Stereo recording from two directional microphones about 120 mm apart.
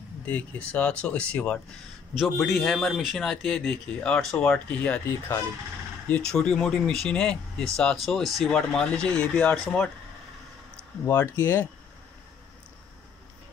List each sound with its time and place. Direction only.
0.7 s speech: 10° left (ahead or behind)
11.1 s speech: 20° left (ahead or behind)